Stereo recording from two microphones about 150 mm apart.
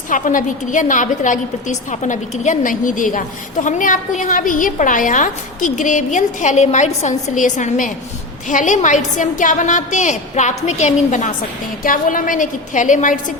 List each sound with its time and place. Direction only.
0.1 s a woman's voice: 60° left (ahead or behind)
11.8 s a woman's voice: 65° left (ahead or behind)